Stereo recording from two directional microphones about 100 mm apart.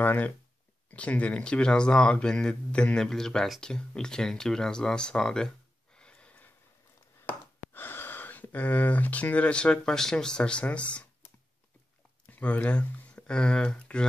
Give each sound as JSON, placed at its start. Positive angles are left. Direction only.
{"t": 0.0, "sound": "speech", "side_deg": 20}
{"t": 5.9, "sound": "a sound", "side_deg": 10}
{"t": 7.2, "sound": "speech", "side_deg": 20}
{"t": 12.3, "sound": "speech", "side_deg": 15}